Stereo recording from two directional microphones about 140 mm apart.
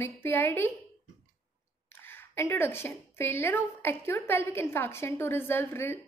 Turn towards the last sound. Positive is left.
turn(degrees=15)  # may be behind; listen again after turning